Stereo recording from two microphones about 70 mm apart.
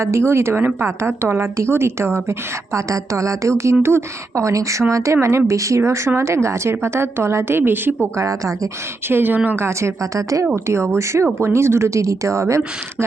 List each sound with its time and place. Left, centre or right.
0.0 s a woman's voice: right
5.1 s a woman's voice: right
5.5 s a woman's voice: right
8.1 s a woman's voice: right
9.0 s a woman's voice: right
9.6 s a woman's voice: right
10.5 s a woman's voice: right